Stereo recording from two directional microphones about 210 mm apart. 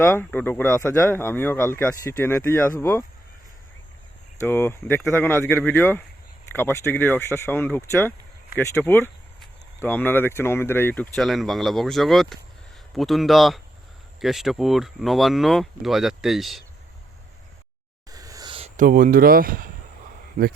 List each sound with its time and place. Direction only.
0.0 s speech: 10° left (ahead or behind)
4.4 s speech: 10° left (ahead or behind)
18.1 s a sound: 15° right (ahead or behind)
18.8 s speech: 40° right (ahead or behind)